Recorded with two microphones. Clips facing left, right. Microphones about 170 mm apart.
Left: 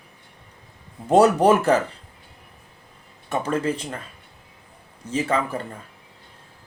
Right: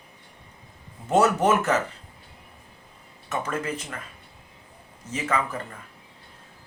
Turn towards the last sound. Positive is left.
turn(degrees=30)  # may be behind; listen again after turning